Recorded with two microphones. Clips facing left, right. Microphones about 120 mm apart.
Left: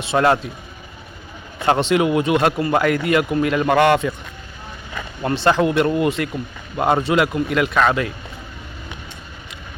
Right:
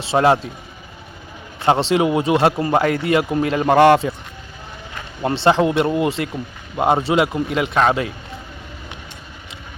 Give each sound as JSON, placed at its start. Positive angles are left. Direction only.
{"t": 0.0, "sound": "speech", "side_deg": -30}
{"t": 1.6, "sound": "speech", "side_deg": -25}
{"t": 5.2, "sound": "speech", "side_deg": -25}